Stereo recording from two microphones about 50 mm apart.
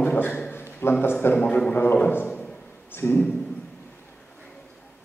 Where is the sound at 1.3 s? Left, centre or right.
Left.